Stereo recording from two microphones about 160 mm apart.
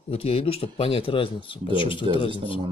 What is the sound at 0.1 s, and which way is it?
Speech, 40° left (ahead or behind).